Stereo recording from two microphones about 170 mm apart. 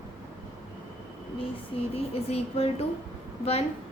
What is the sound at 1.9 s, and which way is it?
Speech, 35° left (ahead or behind).